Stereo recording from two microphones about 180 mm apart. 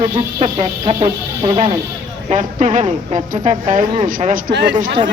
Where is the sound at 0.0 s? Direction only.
30° right (ahead or behind).